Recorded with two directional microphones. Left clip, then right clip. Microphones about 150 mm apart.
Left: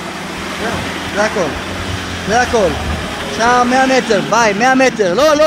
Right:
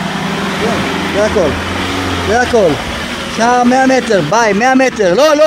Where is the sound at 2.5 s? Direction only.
60° right (ahead or behind).